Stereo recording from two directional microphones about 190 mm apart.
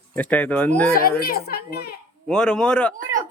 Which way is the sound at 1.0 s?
50° left (ahead or behind).